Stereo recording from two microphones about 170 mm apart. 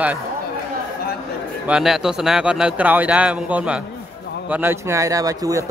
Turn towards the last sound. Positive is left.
turn(degrees=-20)  # may be behind; listen again after turning